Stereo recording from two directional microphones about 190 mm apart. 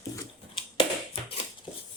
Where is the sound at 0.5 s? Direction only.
25° left (ahead or behind).